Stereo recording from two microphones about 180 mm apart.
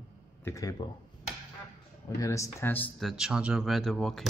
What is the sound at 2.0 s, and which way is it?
Speech, 15° left (ahead or behind).